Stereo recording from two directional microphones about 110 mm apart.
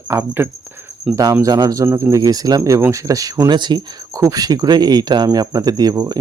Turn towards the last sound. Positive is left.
turn(degrees=-35)  # may be behind; listen again after turning